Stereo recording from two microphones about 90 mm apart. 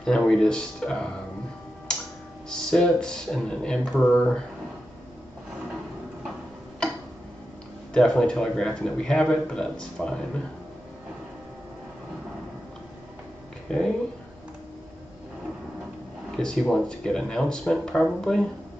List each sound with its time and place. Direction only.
0.0 s a man's voice: 5° left (ahead or behind)
1.9 s music: 10° left (ahead or behind)
2.5 s a man's voice: 10° left (ahead or behind)
7.9 s a man's voice: 10° left (ahead or behind)
13.7 s speech: 5° left (ahead or behind)
16.3 s a man's voice: 5° left (ahead or behind)